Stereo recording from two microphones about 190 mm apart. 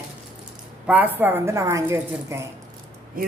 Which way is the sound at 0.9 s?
10° right (ahead or behind).